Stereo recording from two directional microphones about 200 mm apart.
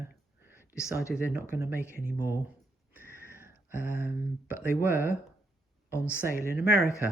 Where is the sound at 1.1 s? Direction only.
5° right (ahead or behind).